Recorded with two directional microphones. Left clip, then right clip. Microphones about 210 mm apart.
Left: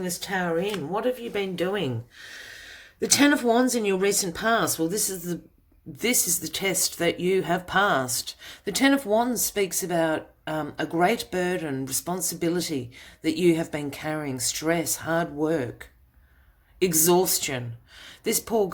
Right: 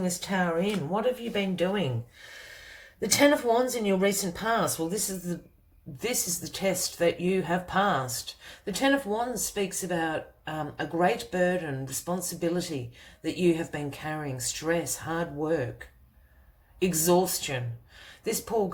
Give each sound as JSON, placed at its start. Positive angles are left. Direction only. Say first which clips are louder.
{"t": 0.0, "sound": "speech", "louder": "left 1 dB", "side_deg": 45}
{"t": 16.8, "sound": "speech", "louder": "left 3 dB", "side_deg": 50}
{"t": 18.0, "sound": "gasp", "louder": "left 4 dB", "side_deg": 50}